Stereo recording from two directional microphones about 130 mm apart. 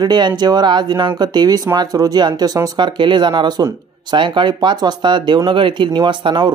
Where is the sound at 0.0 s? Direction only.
35° right (ahead or behind).